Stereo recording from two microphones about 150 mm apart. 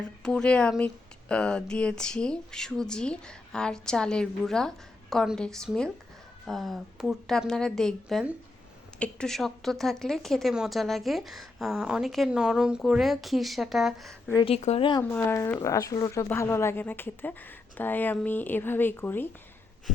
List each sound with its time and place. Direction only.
0.2 s a woman's voice: 5° left (ahead or behind)
14.4 s speech: 45° left (ahead or behind)
15.1 s speech: 15° left (ahead or behind)